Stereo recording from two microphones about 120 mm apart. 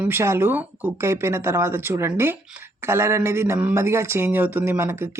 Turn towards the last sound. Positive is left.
turn(degrees=-20)  # may be behind; listen again after turning